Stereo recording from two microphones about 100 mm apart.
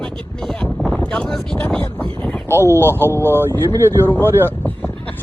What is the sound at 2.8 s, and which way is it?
Speech, 25° left (ahead or behind).